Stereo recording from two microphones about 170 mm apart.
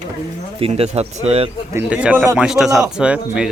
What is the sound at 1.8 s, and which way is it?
A man's voice, 10° right (ahead or behind).